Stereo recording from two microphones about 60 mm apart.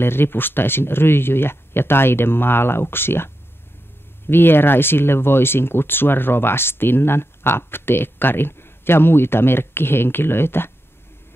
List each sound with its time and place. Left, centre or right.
0.0 s speech: left
4.3 s speech: left